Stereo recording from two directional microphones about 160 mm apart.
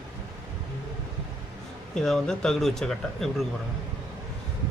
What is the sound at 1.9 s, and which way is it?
Speech, 5° left (ahead or behind).